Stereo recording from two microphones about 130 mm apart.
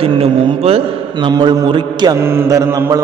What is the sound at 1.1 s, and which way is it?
A man's voice, 35° right (ahead or behind).